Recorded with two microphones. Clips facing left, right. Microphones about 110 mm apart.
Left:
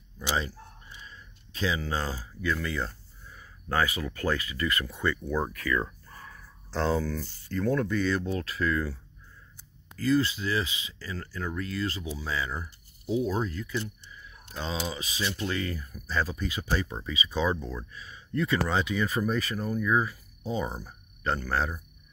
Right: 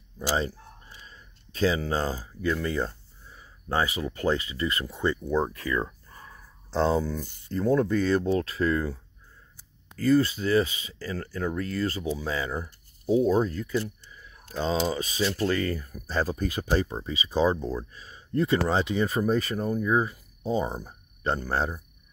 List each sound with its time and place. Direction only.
0.2 s a sound: 40° right (ahead or behind)
2.4 s speech: 30° right (ahead or behind)
7.5 s speech: 30° right (ahead or behind)
7.9 s speech: 40° right (ahead or behind)
9.9 s speech: 45° right (ahead or behind); by 21.7 s 30° right (ahead or behind)